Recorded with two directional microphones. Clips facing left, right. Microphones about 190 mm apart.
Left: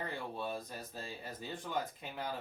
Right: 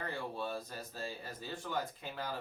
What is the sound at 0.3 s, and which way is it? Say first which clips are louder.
Speech: even; 15° left (ahead or behind).